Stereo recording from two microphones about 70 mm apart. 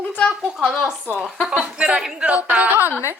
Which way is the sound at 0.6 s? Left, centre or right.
Centre.